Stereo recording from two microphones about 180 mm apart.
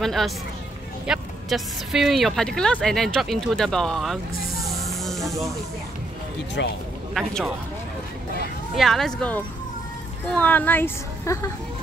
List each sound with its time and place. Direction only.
0.0 s speech: centre (ahead or behind)
6.6 s speech: 75° left (ahead or behind)
7.2 s speech: centre (ahead or behind)
8.7 s a woman's voice: centre (ahead or behind)